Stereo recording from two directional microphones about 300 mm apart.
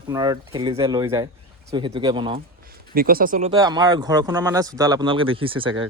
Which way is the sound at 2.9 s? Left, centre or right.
Right.